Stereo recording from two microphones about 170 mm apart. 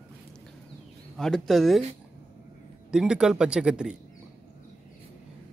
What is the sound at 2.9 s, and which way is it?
Speech, 5° right (ahead or behind).